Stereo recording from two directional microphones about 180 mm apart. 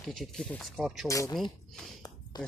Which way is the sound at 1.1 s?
20° left (ahead or behind).